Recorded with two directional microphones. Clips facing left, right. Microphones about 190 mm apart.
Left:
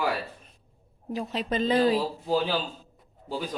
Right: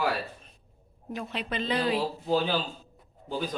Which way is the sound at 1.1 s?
35° left (ahead or behind).